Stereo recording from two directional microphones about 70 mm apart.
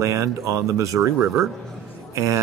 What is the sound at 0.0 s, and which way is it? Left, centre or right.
Speech, right.